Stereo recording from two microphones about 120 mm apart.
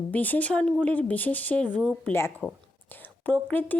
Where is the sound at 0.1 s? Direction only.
15° left (ahead or behind).